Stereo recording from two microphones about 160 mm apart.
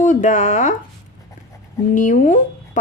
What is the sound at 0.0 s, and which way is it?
Speech, 55° left (ahead or behind).